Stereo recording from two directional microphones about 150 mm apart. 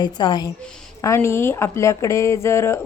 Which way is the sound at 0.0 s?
30° left (ahead or behind).